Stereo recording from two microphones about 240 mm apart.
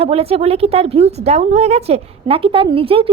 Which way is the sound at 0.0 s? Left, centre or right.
Right.